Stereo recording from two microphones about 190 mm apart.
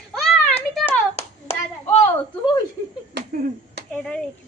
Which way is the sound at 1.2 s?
30° left (ahead or behind).